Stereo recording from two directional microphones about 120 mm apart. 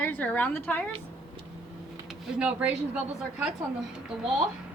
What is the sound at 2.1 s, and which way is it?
Speech, 10° right (ahead or behind).